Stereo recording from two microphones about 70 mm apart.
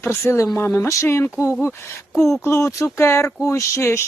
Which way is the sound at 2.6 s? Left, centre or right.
Left.